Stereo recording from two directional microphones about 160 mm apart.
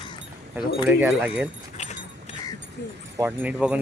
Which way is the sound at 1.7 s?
45° left (ahead or behind).